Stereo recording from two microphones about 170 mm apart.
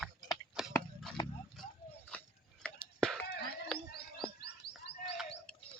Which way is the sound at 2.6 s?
5° left (ahead or behind).